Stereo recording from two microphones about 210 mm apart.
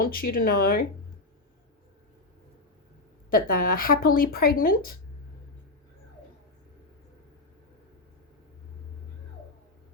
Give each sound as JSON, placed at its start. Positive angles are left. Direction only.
{"t": 0.0, "sound": "speech", "side_deg": 45}
{"t": 3.2, "sound": "speech", "side_deg": 45}